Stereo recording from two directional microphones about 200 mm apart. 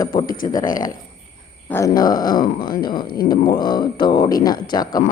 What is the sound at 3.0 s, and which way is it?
Speech, 50° left (ahead or behind).